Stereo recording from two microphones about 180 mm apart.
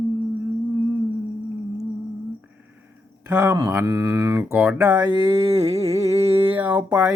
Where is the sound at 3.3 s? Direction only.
20° right (ahead or behind).